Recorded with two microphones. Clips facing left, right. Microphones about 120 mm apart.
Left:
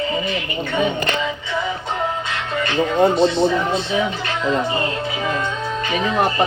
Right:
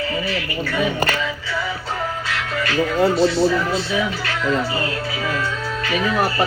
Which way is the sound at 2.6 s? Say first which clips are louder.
Left 2 dB; 25° left (ahead or behind).